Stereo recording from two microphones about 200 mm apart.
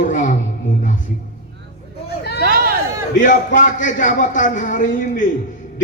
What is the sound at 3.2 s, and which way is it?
A man's voice, 40° left (ahead or behind).